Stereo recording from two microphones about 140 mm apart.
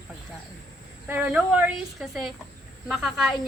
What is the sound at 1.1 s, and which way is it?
Speech, 10° right (ahead or behind).